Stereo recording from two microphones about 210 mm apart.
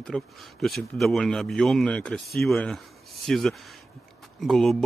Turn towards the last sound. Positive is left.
turn(degrees=0)  # may be behind; listen again after turning